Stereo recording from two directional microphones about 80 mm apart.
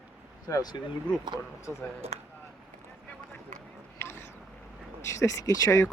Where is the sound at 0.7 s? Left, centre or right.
Left.